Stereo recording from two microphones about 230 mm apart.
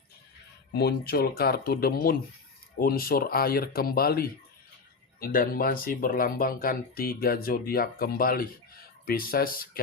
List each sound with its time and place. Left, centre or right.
0.7 s speech: left